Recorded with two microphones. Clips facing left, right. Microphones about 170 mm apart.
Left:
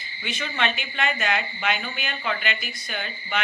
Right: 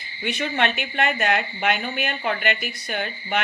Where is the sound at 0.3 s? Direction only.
60° right (ahead or behind).